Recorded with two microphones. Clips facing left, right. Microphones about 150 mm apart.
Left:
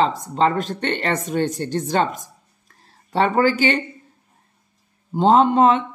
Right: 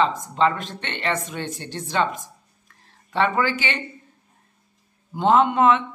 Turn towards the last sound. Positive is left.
turn(degrees=35)  # may be behind; listen again after turning